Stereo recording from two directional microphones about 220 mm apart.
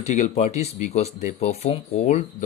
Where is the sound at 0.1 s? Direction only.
30° left (ahead or behind).